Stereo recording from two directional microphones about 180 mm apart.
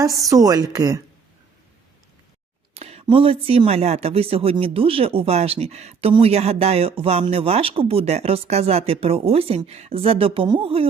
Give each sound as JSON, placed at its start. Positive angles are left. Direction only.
{"t": 0.2, "sound": "a woman's voice", "side_deg": -20}
{"t": 2.7, "sound": "speech", "side_deg": -35}